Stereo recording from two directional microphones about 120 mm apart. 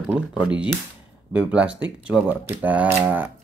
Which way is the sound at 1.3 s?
10° right (ahead or behind).